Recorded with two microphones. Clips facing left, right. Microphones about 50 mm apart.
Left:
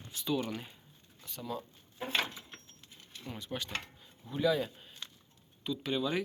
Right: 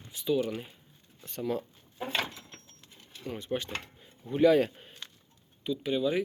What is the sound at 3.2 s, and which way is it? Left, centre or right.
Speech, right.